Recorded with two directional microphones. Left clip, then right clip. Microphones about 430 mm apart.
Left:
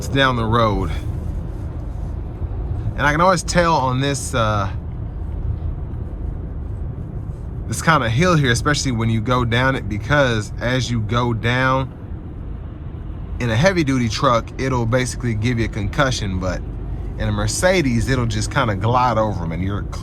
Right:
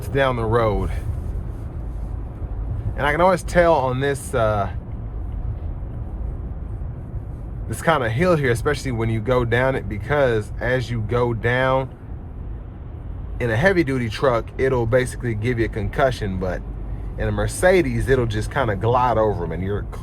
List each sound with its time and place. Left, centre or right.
0.1 s speech: centre
2.9 s speech: centre
7.9 s speech: centre
13.4 s speech: centre